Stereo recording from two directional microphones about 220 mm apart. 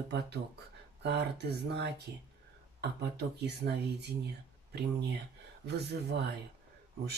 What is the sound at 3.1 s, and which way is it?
Speech, 50° right (ahead or behind).